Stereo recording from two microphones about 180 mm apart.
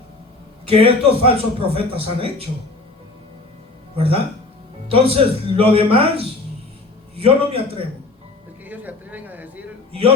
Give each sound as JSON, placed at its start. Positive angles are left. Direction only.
{"t": 0.7, "sound": "a man's voice", "side_deg": -30}
{"t": 3.9, "sound": "a man's voice", "side_deg": -30}
{"t": 8.6, "sound": "a sound", "side_deg": -10}